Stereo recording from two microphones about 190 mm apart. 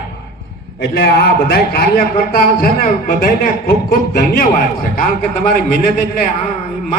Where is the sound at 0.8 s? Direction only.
60° left (ahead or behind).